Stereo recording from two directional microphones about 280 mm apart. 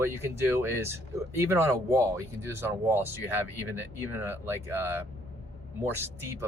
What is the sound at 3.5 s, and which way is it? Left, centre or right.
Speech, left.